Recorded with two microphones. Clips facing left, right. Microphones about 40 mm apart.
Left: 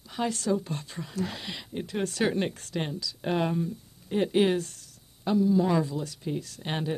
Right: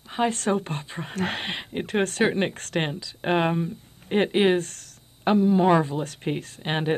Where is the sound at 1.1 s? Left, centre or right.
Right.